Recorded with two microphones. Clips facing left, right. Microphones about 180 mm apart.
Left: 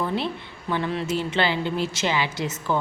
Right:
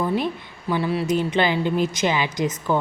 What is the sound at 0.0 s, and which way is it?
A woman's voice, 10° right (ahead or behind).